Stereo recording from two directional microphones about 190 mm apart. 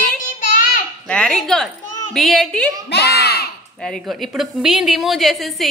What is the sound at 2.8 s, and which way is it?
Speech, 60° left (ahead or behind).